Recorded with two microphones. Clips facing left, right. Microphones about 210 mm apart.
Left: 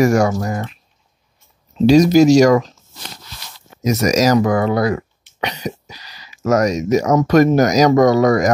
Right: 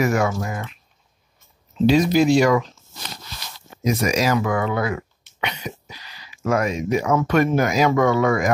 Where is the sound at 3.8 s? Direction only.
40° left (ahead or behind).